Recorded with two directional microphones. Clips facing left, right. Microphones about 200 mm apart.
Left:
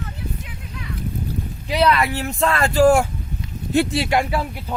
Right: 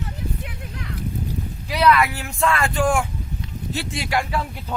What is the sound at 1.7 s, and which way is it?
Speech, 25° left (ahead or behind).